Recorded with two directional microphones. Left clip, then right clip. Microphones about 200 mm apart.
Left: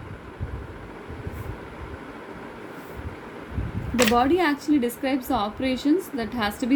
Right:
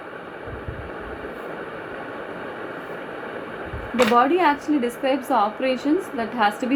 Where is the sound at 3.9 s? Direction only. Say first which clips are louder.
Right 3 dB; 55° left (ahead or behind).